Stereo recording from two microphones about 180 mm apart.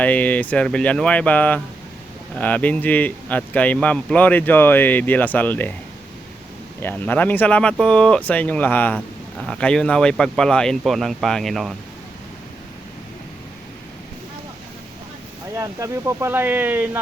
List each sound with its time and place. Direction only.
0.0 s speech: 10° left (ahead or behind)
6.8 s speech: 10° left (ahead or behind)
15.5 s speech: 15° right (ahead or behind)